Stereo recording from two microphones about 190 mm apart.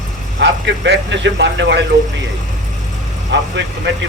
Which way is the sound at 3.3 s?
65° right (ahead or behind).